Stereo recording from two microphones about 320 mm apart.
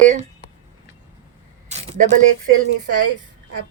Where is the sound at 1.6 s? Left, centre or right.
Right.